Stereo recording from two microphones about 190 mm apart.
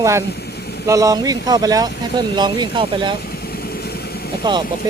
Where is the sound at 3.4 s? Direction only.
55° left (ahead or behind).